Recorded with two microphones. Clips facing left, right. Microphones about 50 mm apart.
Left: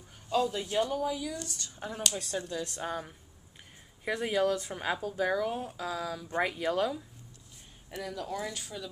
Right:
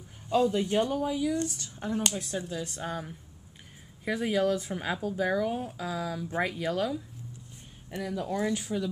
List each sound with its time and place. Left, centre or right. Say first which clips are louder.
0.3 s speech: right 4 dB; right; by 7.0 s centre
8.0 s speech: right 5 dB; centre